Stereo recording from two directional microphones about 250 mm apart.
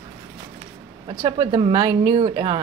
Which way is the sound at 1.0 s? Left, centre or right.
Right.